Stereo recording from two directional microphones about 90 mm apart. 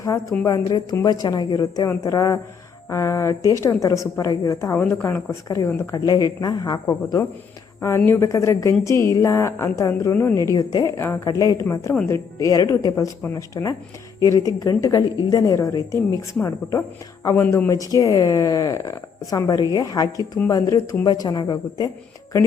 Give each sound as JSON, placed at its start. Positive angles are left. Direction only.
{"t": 0.0, "sound": "a woman's voice", "side_deg": 40}
{"t": 1.9, "sound": "a woman's voice", "side_deg": 35}
{"t": 5.9, "sound": "speech", "side_deg": 45}
{"t": 7.8, "sound": "a woman's voice", "side_deg": 30}